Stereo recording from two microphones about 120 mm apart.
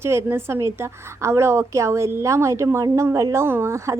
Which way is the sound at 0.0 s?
20° right (ahead or behind).